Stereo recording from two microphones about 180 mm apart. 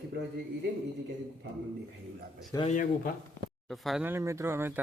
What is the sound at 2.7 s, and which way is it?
Speech, 50° left (ahead or behind).